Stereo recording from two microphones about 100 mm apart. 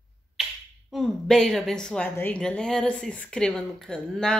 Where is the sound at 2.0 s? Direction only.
20° left (ahead or behind).